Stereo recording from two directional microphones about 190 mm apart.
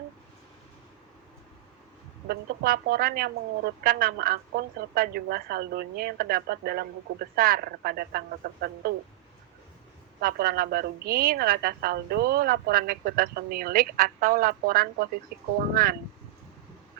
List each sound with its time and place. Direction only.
2.2 s a woman's voice: 55° right (ahead or behind)
10.2 s a woman's voice: 55° right (ahead or behind)